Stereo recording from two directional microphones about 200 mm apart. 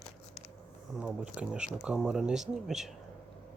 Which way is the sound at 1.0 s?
5° right (ahead or behind).